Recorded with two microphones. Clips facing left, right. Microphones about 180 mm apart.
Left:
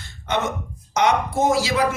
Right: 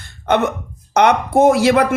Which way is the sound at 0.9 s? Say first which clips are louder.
Right 6 dB; 60° right (ahead or behind).